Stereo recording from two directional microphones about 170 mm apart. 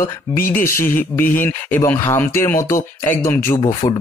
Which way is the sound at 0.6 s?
15° left (ahead or behind).